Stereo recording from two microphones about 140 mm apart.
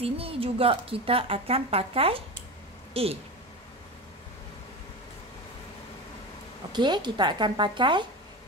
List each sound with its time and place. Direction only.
0.0 s a woman's voice: 45° right (ahead or behind)
6.7 s speech: 30° right (ahead or behind)